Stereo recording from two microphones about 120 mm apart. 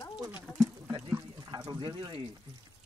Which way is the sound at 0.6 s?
25° right (ahead or behind).